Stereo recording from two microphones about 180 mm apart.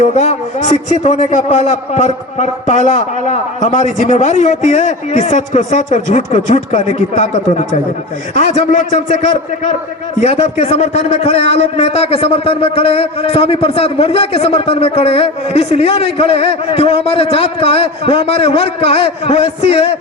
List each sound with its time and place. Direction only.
0.0 s a man's voice: 40° left (ahead or behind)
10.6 s a man's voice: 35° left (ahead or behind)